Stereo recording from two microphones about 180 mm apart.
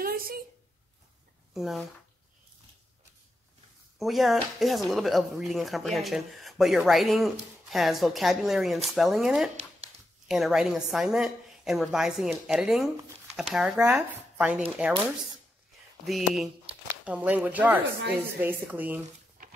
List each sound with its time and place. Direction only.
0.0 s a sound: 55° right (ahead or behind)
1.5 s speech: centre (ahead or behind)
4.0 s a woman's voice: centre (ahead or behind)
13.7 s speech: 15° right (ahead or behind)
16.1 s a woman's voice: centre (ahead or behind)